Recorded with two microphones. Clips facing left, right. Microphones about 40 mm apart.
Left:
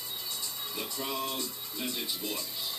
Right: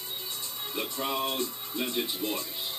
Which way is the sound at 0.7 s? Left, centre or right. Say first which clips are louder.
Right 5 dB; right.